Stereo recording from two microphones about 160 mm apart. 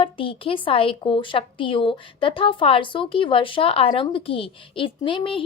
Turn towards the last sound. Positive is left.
turn(degrees=35)  # may be behind; listen again after turning